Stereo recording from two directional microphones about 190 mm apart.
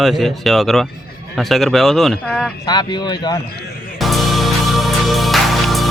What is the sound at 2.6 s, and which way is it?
Speech, 20° left (ahead or behind).